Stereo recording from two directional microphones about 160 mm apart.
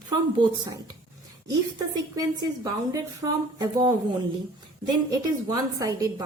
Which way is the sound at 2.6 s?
25° right (ahead or behind).